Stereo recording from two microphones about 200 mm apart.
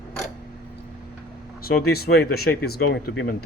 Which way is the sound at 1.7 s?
50° left (ahead or behind).